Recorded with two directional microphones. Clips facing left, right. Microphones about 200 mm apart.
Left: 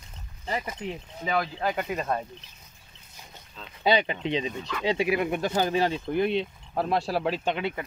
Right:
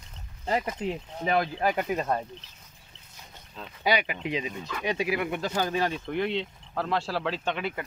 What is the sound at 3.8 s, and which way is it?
Speech, 30° left (ahead or behind).